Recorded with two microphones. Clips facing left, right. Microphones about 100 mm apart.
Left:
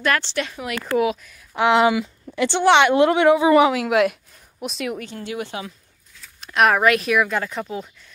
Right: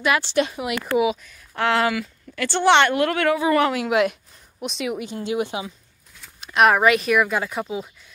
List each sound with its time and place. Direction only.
0.0 s a woman's voice: 10° right (ahead or behind)
1.5 s speech: 15° left (ahead or behind)
2.6 s speech: 5° left (ahead or behind)
2.9 s speech: 20° left (ahead or behind)
3.7 s speech: centre (ahead or behind)
4.9 s a woman's voice: 15° right (ahead or behind)
6.4 s speech: centre (ahead or behind)